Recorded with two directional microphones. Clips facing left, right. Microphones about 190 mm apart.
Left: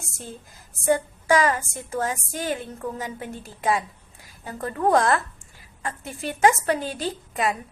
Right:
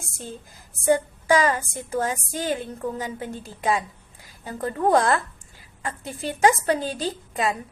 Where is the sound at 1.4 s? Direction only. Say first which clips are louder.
Even; 25° right (ahead or behind).